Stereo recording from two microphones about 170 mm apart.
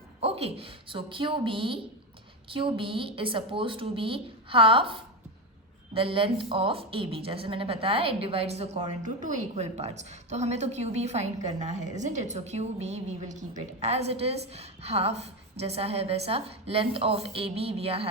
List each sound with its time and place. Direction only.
0.2 s a woman's voice: 35° right (ahead or behind)